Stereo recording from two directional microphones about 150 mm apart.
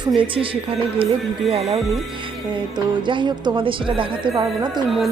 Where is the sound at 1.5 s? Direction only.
40° right (ahead or behind).